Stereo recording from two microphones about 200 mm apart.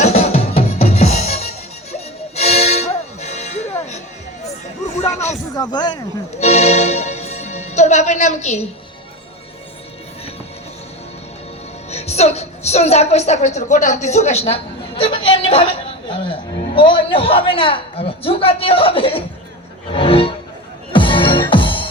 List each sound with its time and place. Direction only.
0.0 s music: 35° left (ahead or behind)
5.5 s a woman's voice: 20° left (ahead or behind)
6.4 s music: 35° left (ahead or behind)
11.9 s a woman's voice: 30° left (ahead or behind)
19.9 s music: 25° left (ahead or behind)